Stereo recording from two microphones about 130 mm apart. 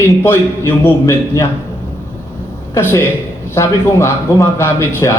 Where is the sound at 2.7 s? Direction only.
20° left (ahead or behind).